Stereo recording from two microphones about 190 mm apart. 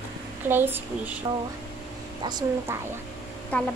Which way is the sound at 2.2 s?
20° right (ahead or behind).